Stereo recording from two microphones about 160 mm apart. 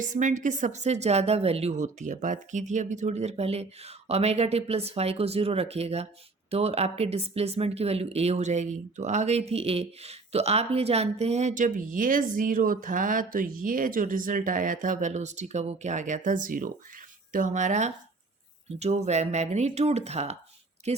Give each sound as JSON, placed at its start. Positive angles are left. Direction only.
{"t": 0.0, "sound": "speech", "side_deg": -50}